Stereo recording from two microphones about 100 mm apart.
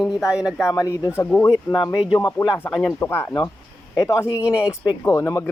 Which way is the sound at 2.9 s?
20° left (ahead or behind).